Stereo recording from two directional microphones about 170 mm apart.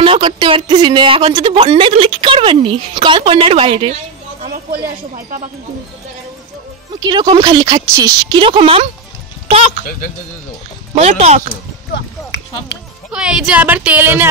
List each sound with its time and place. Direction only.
0.0 s speech: 30° right (ahead or behind)
4.5 s a woman's voice: 60° right (ahead or behind)
7.0 s speech: 25° right (ahead or behind)
11.0 s speech: 40° right (ahead or behind)
13.1 s speech: 5° right (ahead or behind)